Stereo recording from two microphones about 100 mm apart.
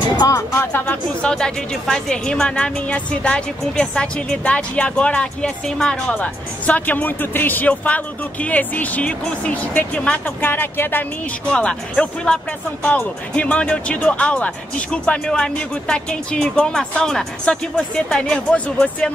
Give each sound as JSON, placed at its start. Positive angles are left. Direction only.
{"t": 0.6, "sound": "speech", "side_deg": 20}
{"t": 1.2, "sound": "a woman's voice", "side_deg": 5}